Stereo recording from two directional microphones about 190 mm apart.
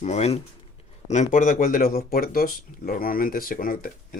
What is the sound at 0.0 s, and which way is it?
Speech, 35° left (ahead or behind).